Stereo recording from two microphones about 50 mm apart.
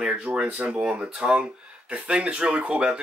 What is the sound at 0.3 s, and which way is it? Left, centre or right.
Speech, right.